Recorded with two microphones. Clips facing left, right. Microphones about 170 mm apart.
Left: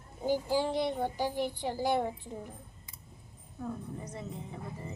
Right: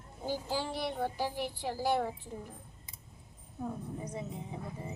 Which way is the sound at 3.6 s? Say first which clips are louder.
Even; 15° right (ahead or behind).